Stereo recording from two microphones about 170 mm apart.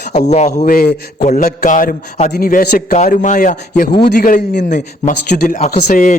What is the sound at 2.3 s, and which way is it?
A man's voice, 60° left (ahead or behind).